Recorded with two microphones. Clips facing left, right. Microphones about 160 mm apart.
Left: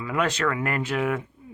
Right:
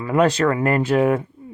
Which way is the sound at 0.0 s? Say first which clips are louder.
Right 8 dB; 35° right (ahead or behind).